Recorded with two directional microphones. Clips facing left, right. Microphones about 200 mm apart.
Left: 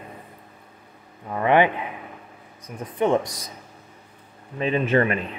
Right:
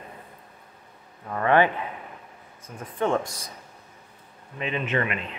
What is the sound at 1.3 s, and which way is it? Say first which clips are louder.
Speech: left 2 dB; 15° left (ahead or behind).